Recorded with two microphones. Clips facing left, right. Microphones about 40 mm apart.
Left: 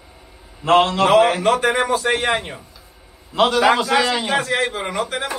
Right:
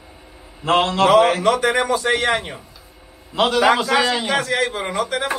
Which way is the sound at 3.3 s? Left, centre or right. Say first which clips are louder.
Left 1 dB; centre.